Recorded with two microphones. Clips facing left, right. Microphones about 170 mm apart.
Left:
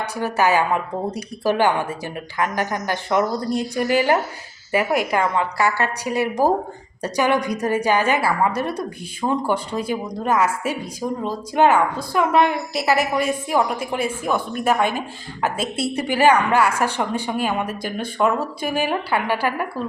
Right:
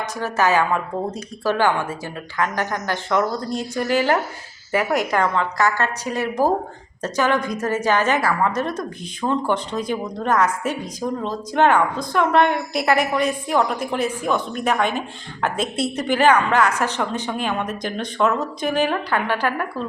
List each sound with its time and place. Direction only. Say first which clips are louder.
0.2 s a woman's voice: even; 15° left (ahead or behind)